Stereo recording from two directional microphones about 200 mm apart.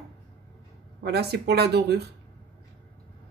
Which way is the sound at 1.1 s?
55° right (ahead or behind).